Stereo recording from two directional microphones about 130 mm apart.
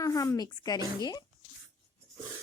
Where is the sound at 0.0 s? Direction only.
25° left (ahead or behind).